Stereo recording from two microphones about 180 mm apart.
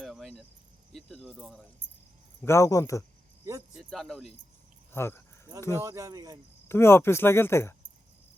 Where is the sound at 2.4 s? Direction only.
15° left (ahead or behind).